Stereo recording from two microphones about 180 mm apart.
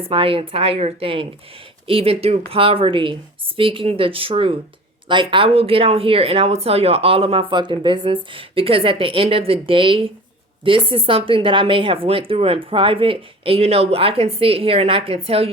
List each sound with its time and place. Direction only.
0.0 s speech: 30° right (ahead or behind)